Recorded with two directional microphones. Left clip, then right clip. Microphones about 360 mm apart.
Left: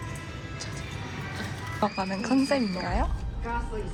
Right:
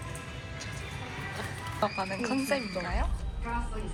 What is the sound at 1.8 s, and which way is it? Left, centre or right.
Speech, centre.